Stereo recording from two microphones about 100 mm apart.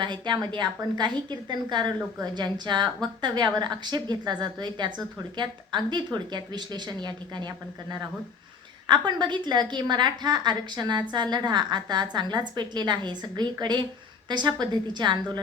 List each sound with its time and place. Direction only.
0.0 s a woman's voice: 50° right (ahead or behind)
8.9 s a woman's voice: 50° right (ahead or behind)